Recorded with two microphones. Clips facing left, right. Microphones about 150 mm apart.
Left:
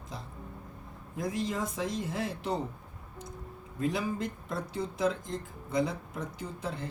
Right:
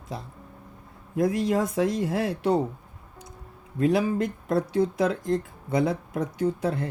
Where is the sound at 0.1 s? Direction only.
65° right (ahead or behind).